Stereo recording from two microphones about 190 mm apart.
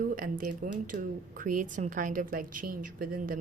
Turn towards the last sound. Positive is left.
turn(degrees=-50)  # may be behind; listen again after turning